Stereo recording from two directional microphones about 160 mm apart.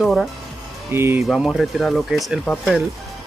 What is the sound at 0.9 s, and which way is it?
Speech, 15° right (ahead or behind).